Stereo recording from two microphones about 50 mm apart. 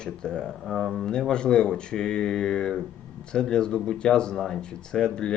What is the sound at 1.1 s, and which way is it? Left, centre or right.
Speech, centre.